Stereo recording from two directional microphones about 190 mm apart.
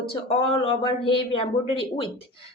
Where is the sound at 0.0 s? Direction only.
30° left (ahead or behind).